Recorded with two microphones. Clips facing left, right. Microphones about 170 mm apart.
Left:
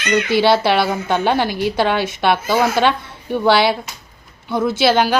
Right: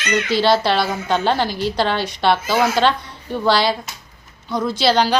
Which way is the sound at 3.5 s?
60° left (ahead or behind).